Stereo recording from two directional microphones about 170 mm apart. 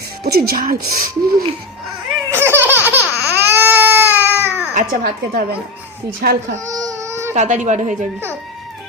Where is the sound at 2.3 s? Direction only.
15° right (ahead or behind).